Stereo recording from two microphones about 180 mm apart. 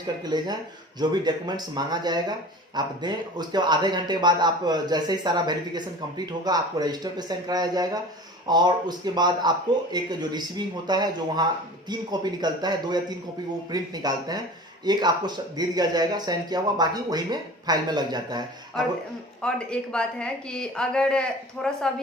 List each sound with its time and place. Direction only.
0.3 s speech: 20° right (ahead or behind)
19.4 s speech: 5° left (ahead or behind)